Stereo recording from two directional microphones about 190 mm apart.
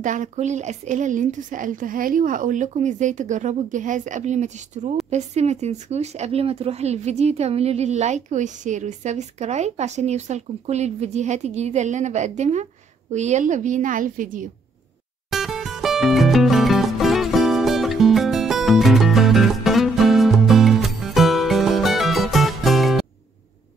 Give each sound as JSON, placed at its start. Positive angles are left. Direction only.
{"t": 0.0, "sound": "a woman's voice", "side_deg": -40}
{"t": 15.2, "sound": "music", "side_deg": 0}